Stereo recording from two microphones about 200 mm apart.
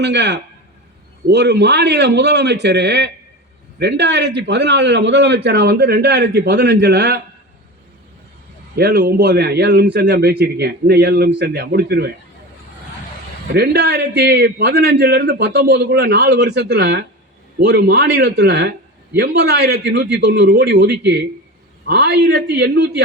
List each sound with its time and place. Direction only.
0.0 s a man's voice: 60° right (ahead or behind)
8.7 s a man's voice: 55° right (ahead or behind)
13.5 s a man's voice: 55° right (ahead or behind)